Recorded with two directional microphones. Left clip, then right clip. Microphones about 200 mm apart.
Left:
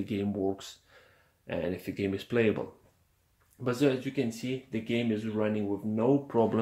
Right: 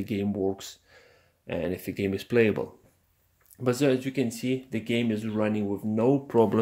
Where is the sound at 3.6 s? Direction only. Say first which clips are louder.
Right 3 dB; 50° right (ahead or behind).